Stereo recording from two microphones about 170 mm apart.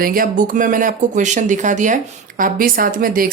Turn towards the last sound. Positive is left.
turn(degrees=-55)  # may be behind; listen again after turning